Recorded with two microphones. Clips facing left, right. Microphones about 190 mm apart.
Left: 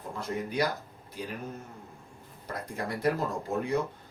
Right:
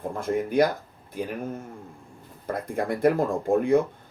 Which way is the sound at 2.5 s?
55° right (ahead or behind).